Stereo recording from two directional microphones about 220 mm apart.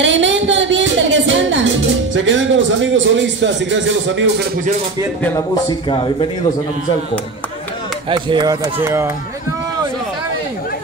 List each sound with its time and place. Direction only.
0.0 s music: 55° right (ahead or behind)
2.1 s a man's voice: 60° right (ahead or behind)
5.2 s a man's voice: 15° left (ahead or behind)
8.1 s speech: 20° right (ahead or behind)